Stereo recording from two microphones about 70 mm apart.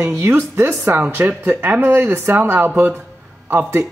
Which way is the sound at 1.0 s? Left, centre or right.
Right.